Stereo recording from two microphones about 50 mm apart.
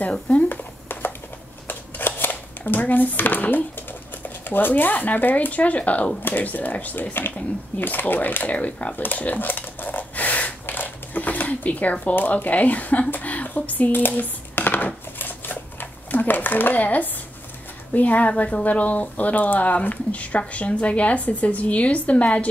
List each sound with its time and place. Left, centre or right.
0.1 s speech: left
0.5 s a sound: left
1.7 s shuffling cards: left
4.5 s speech: left
8.5 s dishes: left
13.1 s a sound: left
17.9 s speech: left